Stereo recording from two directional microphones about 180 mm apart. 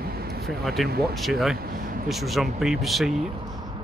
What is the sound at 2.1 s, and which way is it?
A man's voice, centre (ahead or behind).